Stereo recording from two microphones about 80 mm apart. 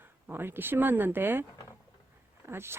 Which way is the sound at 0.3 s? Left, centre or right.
Right.